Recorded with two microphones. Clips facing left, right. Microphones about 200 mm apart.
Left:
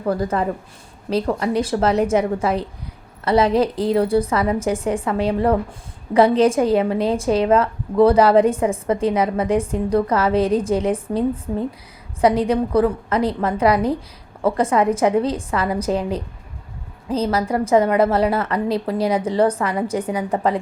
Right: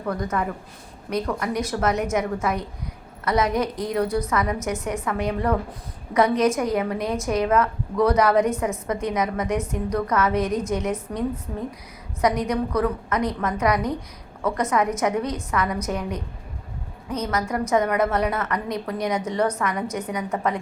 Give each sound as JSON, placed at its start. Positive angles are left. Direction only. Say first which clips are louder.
{"t": 0.0, "sound": "a woman's voice", "louder": "left 5 dB", "side_deg": 30}